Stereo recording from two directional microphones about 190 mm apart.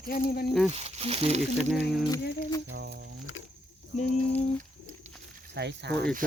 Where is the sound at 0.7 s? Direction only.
35° right (ahead or behind).